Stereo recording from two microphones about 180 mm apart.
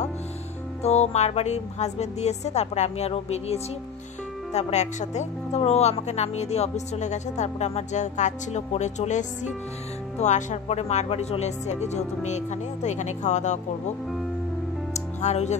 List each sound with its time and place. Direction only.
0.8 s speech: 35° left (ahead or behind)
15.0 s music: 40° left (ahead or behind)